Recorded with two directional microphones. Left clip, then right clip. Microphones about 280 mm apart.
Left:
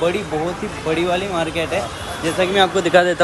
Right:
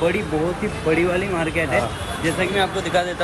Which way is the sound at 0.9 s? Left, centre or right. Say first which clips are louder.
Left 1 dB; centre.